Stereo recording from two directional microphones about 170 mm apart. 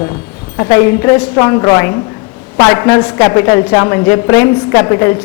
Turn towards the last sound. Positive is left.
turn(degrees=20)  # may be behind; listen again after turning